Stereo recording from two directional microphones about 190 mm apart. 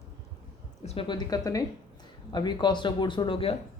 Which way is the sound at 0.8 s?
25° left (ahead or behind).